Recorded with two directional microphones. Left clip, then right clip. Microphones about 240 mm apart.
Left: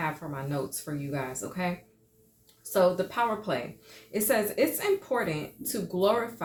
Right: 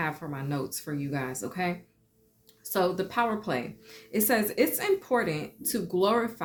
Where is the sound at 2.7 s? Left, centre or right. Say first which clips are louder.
Left 2 dB; right.